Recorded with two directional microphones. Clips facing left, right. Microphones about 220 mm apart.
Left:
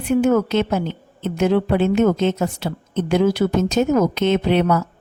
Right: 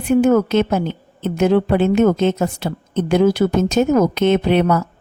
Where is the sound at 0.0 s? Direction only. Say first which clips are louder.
Right 3 dB; 50° right (ahead or behind).